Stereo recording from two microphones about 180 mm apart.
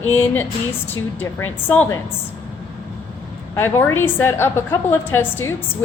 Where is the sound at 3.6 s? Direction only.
15° left (ahead or behind).